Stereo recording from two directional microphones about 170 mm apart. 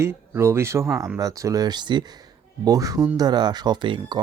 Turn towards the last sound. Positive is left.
turn(degrees=-25)  # may be behind; listen again after turning